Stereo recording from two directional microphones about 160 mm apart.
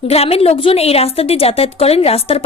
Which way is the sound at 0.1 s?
40° left (ahead or behind).